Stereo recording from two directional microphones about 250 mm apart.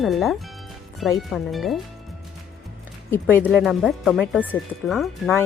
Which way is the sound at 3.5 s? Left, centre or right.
Centre.